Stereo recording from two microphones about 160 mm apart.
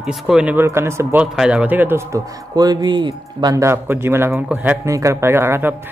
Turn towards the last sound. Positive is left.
turn(degrees=-15)  # may be behind; listen again after turning